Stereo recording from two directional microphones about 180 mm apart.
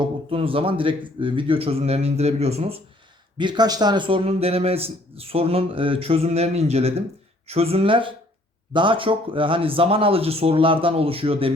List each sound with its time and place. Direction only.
0.0 s a man's voice: 30° right (ahead or behind)